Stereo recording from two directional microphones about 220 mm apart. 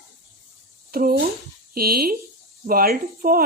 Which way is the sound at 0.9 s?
45° right (ahead or behind).